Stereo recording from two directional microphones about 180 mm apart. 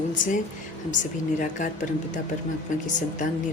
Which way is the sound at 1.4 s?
45° left (ahead or behind).